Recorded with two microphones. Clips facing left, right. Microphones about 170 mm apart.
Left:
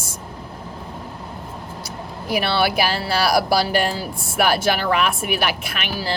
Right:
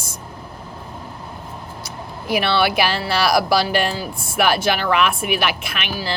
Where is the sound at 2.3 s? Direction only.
40° left (ahead or behind).